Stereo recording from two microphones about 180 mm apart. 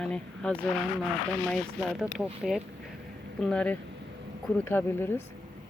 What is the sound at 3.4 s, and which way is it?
Speech, 5° left (ahead or behind).